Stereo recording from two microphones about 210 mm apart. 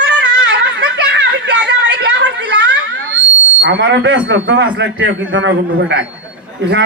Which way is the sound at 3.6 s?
60° right (ahead or behind).